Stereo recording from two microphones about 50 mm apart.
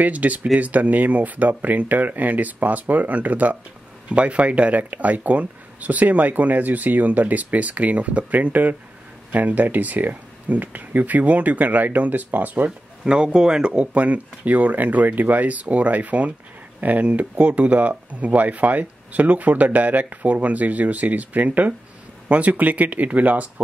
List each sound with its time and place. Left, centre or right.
0.0 s speech: right
13.0 s speech: centre